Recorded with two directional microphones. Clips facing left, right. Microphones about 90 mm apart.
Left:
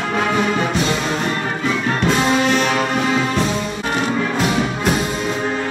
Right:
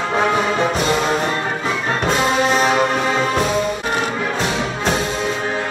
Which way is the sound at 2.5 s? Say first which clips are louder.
Right 1 dB; 35° right (ahead or behind).